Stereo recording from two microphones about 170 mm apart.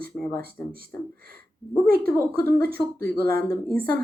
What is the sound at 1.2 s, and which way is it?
Speech, 60° right (ahead or behind).